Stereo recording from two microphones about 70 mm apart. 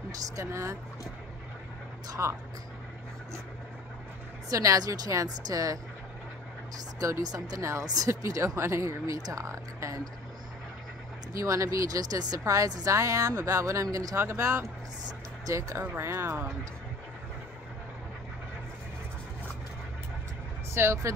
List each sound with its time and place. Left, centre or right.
0.4 s speech: right
2.2 s speech: right
4.5 s a woman's voice: right
7.0 s speech: right
11.3 s speech: right
15.0 s music: right
15.9 s speech: right
20.7 s speech: right